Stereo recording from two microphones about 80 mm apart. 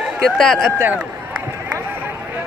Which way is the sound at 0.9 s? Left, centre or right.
Centre.